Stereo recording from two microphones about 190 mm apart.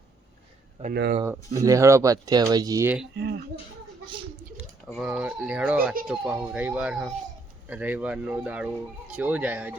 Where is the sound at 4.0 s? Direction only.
25° right (ahead or behind).